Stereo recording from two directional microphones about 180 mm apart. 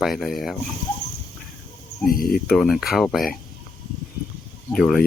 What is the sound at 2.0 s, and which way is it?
Speech, 55° left (ahead or behind).